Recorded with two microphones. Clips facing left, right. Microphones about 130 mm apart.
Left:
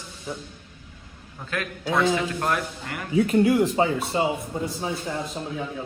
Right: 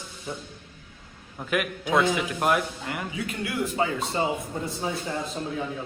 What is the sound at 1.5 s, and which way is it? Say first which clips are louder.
A man's voice: right 2 dB; 15° right (ahead or behind).